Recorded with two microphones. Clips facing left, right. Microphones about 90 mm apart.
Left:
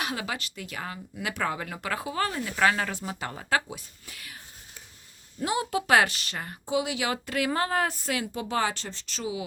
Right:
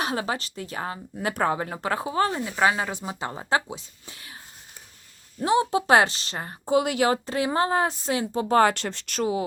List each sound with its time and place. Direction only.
0.0 s speech: 35° right (ahead or behind)
5.4 s speech: 30° right (ahead or behind)
6.7 s speech: 50° right (ahead or behind)
7.3 s speech: 25° right (ahead or behind)
8.5 s speech: 60° right (ahead or behind)